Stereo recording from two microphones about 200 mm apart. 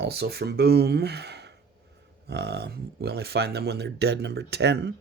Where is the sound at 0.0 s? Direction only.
55° right (ahead or behind).